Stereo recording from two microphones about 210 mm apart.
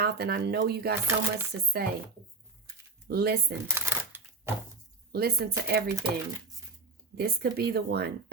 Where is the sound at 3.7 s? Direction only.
10° right (ahead or behind).